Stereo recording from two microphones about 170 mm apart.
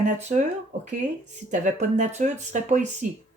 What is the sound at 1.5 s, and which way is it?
Speech, 45° right (ahead or behind).